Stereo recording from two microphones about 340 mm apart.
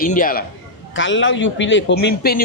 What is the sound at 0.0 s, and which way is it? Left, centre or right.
A man's voice, left.